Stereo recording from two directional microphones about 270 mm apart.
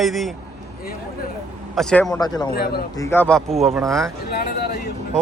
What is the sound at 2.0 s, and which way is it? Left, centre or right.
A man's voice, centre.